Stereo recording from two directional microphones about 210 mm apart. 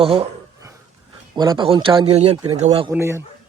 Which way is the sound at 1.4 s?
20° right (ahead or behind).